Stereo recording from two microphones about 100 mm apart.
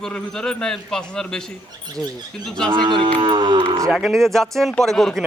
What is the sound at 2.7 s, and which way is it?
Speech, 50° right (ahead or behind).